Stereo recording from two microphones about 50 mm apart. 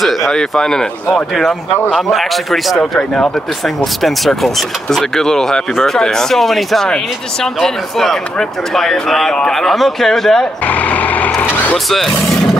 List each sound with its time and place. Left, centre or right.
0.0 s speech: centre
2.1 s a man's voice: centre
10.7 s speech: left
11.4 s vehicle: left